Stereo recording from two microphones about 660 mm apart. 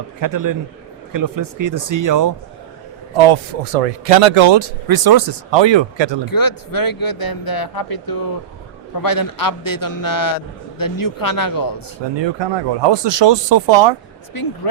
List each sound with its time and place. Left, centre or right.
0.2 s speech: right
3.2 s speech: right
6.2 s a man's voice: left
12.1 s speech: right
14.3 s a man's voice: left